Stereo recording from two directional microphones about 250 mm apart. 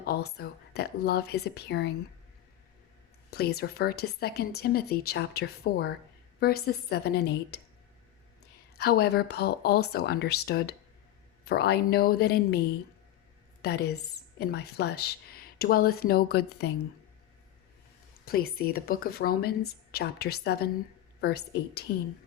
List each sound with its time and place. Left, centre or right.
0.0 s a woman's voice: left
3.2 s a woman's voice: left
8.8 s a woman's voice: left
18.3 s a woman's voice: left